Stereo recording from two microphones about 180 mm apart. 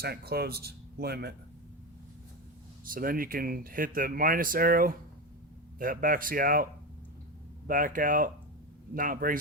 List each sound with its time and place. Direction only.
0.0 s speech: 60° right (ahead or behind)
2.8 s speech: 55° right (ahead or behind)
7.7 s speech: 50° right (ahead or behind)